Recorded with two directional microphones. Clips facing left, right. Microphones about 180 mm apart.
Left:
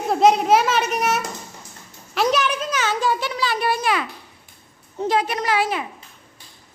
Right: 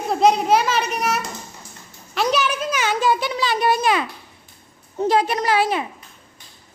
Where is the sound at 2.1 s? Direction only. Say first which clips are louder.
Left 1 dB; centre (ahead or behind); by 4.0 s 20° right (ahead or behind).